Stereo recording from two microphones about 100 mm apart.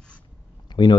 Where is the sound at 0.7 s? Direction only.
50° left (ahead or behind).